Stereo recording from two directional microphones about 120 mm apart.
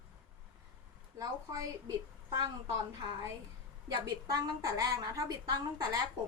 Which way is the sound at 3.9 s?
35° right (ahead or behind).